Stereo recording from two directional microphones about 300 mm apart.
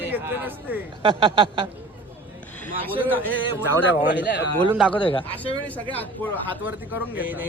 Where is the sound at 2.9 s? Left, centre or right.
Centre.